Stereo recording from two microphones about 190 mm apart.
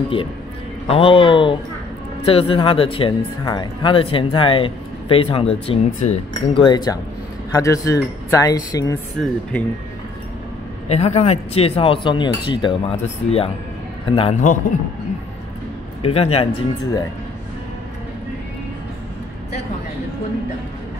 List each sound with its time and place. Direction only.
0.8 s speech: 30° left (ahead or behind)
9.2 s speech: 5° left (ahead or behind)
10.9 s a man's voice: 35° left (ahead or behind)
16.0 s a man's voice: 30° left (ahead or behind)